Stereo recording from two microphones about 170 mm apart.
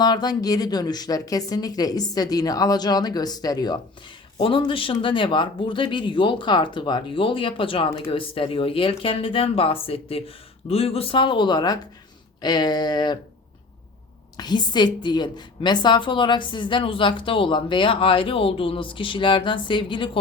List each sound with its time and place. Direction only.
0.0 s a woman's voice: 25° left (ahead or behind)
14.3 s a woman's voice: 25° left (ahead or behind)